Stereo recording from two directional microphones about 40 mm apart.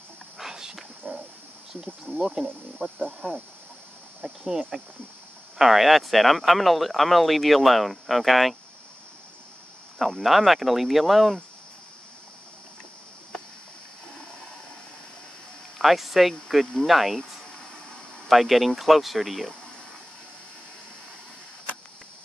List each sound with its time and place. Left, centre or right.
0.4 s a sound: centre
1.0 s a sound: right
2.0 s speech: centre
9.9 s speech: centre
15.8 s speech: centre
18.3 s speech: centre